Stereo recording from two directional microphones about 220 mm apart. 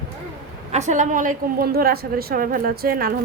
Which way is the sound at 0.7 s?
30° right (ahead or behind).